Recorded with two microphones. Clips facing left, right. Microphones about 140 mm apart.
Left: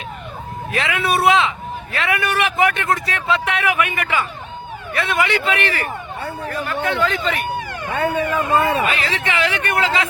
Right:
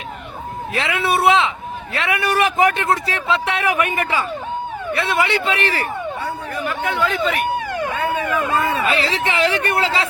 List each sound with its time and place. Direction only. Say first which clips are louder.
0.7 s a man's voice: even; 25° right (ahead or behind)
2.3 s a man's voice: right 4 dB; 40° right (ahead or behind)
6.5 s speech: left 2 dB; 10° right (ahead or behind)
8.3 s speech: left 2 dB; 30° left (ahead or behind)
8.9 s speech: right 2 dB; 35° right (ahead or behind)